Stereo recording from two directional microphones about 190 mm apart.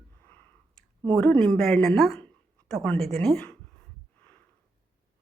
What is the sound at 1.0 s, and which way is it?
Speech, 5° left (ahead or behind).